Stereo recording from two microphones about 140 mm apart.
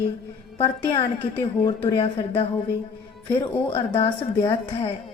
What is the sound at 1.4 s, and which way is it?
Speech, 30° left (ahead or behind).